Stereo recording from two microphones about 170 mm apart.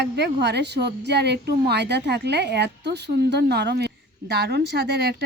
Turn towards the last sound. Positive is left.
turn(degrees=-75)  # may be behind; listen again after turning